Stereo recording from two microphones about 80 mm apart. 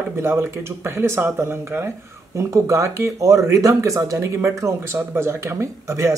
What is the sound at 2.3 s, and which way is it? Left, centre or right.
A woman's voice, right.